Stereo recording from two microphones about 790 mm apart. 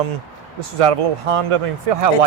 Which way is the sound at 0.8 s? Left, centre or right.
Right.